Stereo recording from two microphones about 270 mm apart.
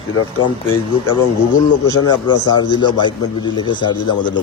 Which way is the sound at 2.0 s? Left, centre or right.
Centre.